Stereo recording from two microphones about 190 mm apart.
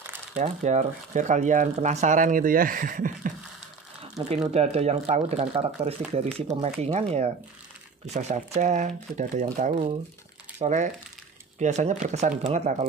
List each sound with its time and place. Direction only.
0.4 s speech: 40° right (ahead or behind)
4.5 s speech: 35° right (ahead or behind)